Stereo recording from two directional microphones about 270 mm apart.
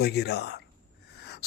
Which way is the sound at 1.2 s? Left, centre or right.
Left.